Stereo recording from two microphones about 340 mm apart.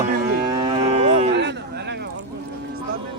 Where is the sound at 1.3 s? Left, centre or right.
Right.